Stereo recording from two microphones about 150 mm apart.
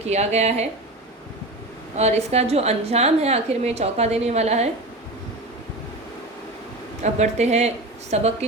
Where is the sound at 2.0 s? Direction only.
45° right (ahead or behind).